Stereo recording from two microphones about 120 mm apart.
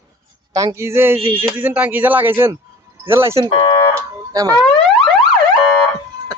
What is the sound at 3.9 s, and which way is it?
Speech, 30° right (ahead or behind).